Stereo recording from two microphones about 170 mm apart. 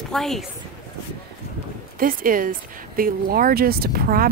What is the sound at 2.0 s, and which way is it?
Speech, 55° right (ahead or behind).